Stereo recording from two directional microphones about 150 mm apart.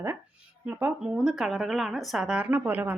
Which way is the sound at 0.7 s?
10° right (ahead or behind).